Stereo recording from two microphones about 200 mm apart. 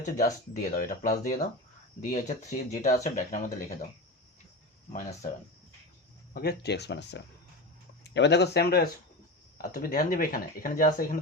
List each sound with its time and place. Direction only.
0.0 s speech: 45° left (ahead or behind)
6.3 s speech: 50° left (ahead or behind)